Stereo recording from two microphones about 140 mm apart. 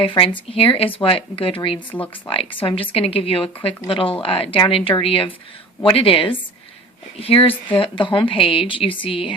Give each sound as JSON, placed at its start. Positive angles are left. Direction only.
{"t": 0.0, "sound": "a woman's voice", "side_deg": 40}